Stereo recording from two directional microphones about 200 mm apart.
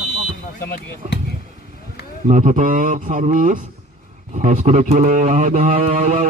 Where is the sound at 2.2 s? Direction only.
40° right (ahead or behind).